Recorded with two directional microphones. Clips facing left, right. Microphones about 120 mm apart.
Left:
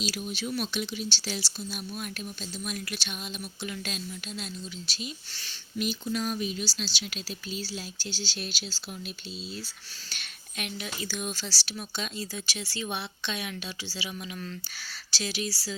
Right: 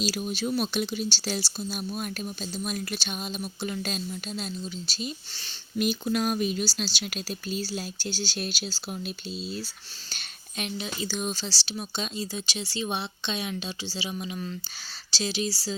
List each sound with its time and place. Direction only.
0.0 s speech: 40° right (ahead or behind)
5.3 s speech: 25° right (ahead or behind)
5.7 s speech: 50° right (ahead or behind)
10.1 s speech: 30° right (ahead or behind)